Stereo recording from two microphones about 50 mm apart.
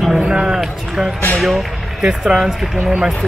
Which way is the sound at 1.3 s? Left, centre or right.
Centre.